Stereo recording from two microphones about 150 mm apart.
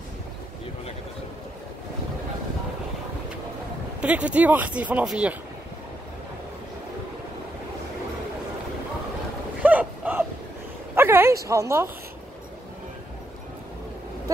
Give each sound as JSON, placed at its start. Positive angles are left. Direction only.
{"t": 4.0, "sound": "speech", "side_deg": -10}
{"t": 9.6, "sound": "a sound", "side_deg": -10}
{"t": 11.4, "sound": "speech", "side_deg": -20}